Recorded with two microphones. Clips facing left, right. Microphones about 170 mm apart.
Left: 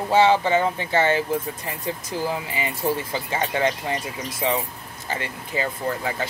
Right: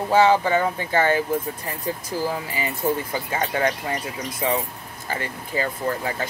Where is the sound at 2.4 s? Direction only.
25° left (ahead or behind).